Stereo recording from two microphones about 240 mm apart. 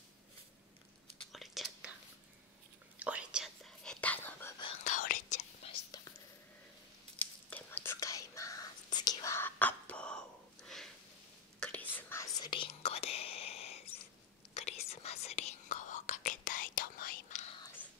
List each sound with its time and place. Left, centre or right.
1.3 s whispering: centre
3.0 s whispering: centre
4.6 s whispering: left
4.9 s whispering: left
5.7 s whispering: centre
7.4 s whispering: centre
11.9 s whispering: centre; by 17.6 s left